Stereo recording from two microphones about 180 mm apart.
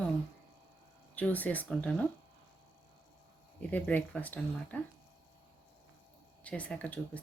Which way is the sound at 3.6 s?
10° left (ahead or behind).